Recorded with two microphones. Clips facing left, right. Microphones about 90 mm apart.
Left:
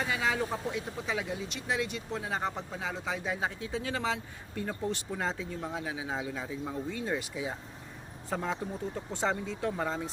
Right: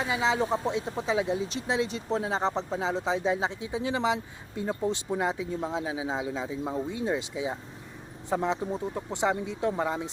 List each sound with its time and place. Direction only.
0.0 s speech: 20° right (ahead or behind)